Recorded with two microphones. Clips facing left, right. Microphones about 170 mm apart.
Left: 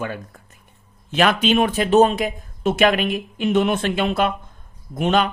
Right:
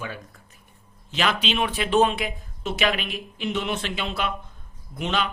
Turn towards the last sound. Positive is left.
turn(degrees=50)  # may be behind; listen again after turning